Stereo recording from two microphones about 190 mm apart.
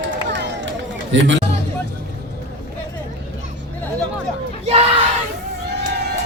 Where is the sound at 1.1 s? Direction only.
75° right (ahead or behind).